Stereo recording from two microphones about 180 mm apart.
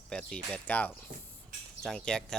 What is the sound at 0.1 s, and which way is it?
Speech, 5° left (ahead or behind).